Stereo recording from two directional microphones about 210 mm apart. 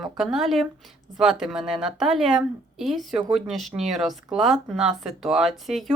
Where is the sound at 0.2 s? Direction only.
Centre (ahead or behind).